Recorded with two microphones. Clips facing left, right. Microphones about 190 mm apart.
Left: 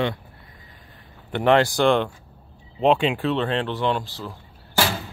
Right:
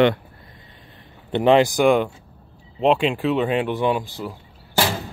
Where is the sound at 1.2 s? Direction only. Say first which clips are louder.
Right 3 dB; 15° right (ahead or behind).